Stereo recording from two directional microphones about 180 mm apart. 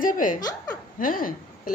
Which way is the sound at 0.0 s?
50° left (ahead or behind).